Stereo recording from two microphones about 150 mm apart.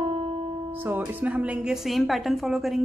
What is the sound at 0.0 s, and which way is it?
Music, 40° right (ahead or behind).